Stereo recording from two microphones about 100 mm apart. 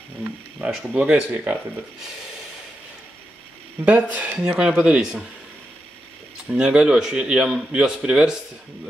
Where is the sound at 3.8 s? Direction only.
15° right (ahead or behind).